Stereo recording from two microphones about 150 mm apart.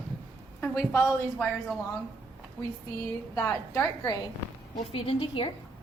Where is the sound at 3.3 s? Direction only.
20° left (ahead or behind).